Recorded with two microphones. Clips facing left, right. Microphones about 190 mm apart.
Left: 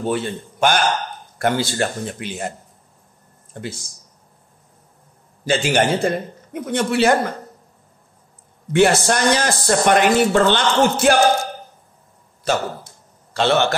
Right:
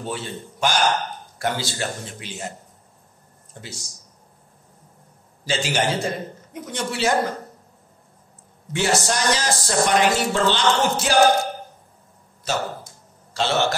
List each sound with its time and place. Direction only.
0.0 s speech: 55° left (ahead or behind)
3.6 s speech: 60° left (ahead or behind)
5.4 s speech: 55° left (ahead or behind)
8.7 s speech: 60° left (ahead or behind)
12.5 s a man's voice: 55° left (ahead or behind)